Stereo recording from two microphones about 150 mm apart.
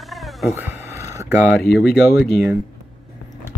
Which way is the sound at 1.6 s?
Centre (ahead or behind).